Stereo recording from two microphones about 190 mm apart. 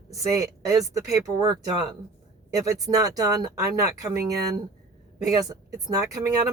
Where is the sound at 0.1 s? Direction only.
15° right (ahead or behind).